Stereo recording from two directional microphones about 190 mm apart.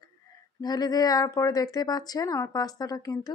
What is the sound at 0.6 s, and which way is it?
A woman's voice, 20° left (ahead or behind).